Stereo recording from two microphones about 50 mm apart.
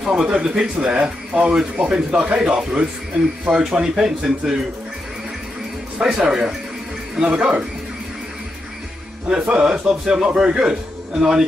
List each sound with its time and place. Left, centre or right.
0.0 s a man's voice: centre
5.9 s a man's voice: centre
9.3 s a man's voice: centre